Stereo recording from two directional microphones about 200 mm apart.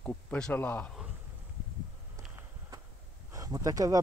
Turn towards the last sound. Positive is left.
turn(degrees=-15)  # may be behind; listen again after turning